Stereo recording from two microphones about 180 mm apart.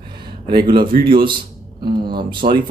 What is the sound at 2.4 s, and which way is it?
Speech, 25° right (ahead or behind).